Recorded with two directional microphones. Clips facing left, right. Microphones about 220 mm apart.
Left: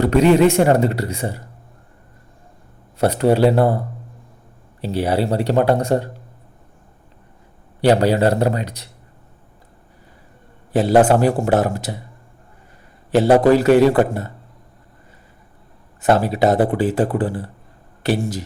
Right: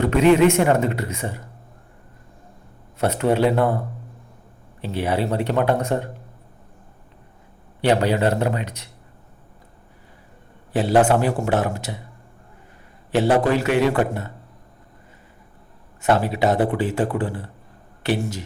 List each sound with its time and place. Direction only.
0.0 s speech: 35° left (ahead or behind)
3.0 s speech: 35° left (ahead or behind)
4.8 s speech: 35° left (ahead or behind)
7.8 s speech: 40° left (ahead or behind)
10.7 s speech: 40° left (ahead or behind)
13.1 s speech: 40° left (ahead or behind)
16.0 s speech: 40° left (ahead or behind)